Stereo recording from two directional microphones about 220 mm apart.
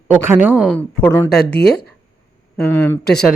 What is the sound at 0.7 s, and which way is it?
Speech, 5° left (ahead or behind).